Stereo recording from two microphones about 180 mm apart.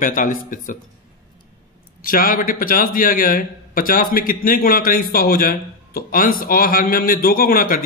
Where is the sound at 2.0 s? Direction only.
50° left (ahead or behind).